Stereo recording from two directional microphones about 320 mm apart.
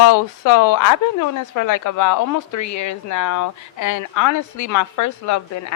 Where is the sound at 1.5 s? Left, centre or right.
Left.